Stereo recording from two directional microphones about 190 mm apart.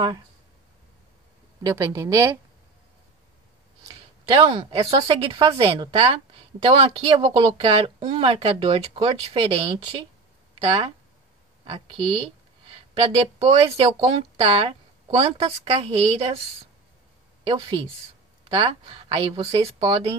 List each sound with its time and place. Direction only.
1.6 s a woman's voice: 15° right (ahead or behind)
3.8 s speech: 25° right (ahead or behind)
13.4 s a woman's voice: 30° right (ahead or behind)
17.5 s speech: 25° right (ahead or behind)